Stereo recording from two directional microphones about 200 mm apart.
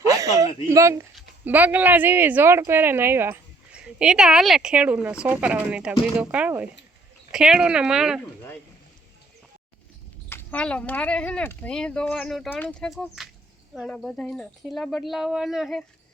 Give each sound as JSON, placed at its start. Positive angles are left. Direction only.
{"t": 0.1, "sound": "speech", "side_deg": -15}
{"t": 10.2, "sound": "speech", "side_deg": 10}